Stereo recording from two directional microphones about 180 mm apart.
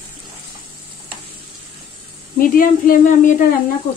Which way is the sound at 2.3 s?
50° left (ahead or behind).